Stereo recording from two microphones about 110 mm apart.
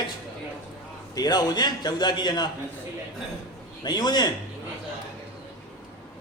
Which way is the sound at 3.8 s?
40° left (ahead or behind).